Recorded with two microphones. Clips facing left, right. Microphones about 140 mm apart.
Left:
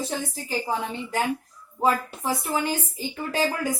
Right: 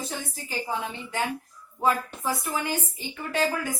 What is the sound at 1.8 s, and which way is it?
Speech, 30° left (ahead or behind).